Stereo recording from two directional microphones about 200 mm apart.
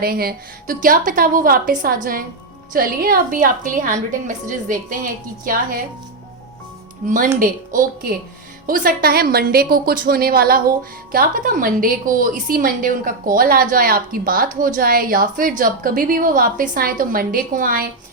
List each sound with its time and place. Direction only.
0.0 s a woman's voice: 50° right (ahead or behind)
7.1 s a woman's voice: 40° right (ahead or behind)